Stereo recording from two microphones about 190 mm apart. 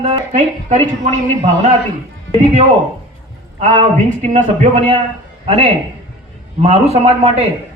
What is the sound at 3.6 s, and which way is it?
A man's voice, 40° right (ahead or behind).